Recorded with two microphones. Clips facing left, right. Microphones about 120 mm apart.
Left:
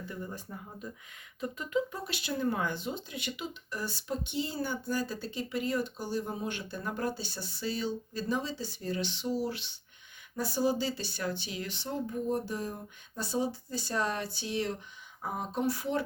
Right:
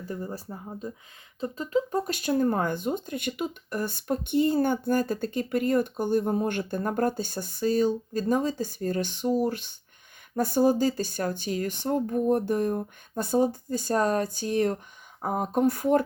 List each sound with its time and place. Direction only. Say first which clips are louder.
0.0 s speech: right 6 dB; 40° right (ahead or behind)